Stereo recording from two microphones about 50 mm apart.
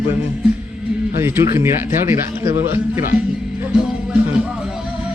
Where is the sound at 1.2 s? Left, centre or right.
Right.